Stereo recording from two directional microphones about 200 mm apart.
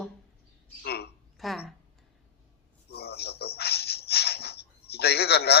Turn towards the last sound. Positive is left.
turn(degrees=55)  # may be behind; listen again after turning